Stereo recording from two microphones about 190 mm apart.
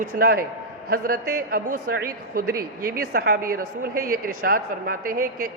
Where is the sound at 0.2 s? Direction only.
50° right (ahead or behind).